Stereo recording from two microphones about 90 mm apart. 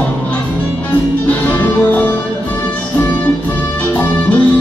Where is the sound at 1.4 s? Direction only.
20° left (ahead or behind).